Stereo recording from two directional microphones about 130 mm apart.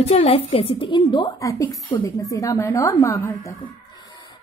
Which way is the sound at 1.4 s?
25° left (ahead or behind).